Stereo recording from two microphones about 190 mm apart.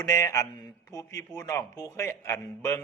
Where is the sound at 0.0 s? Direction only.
15° left (ahead or behind).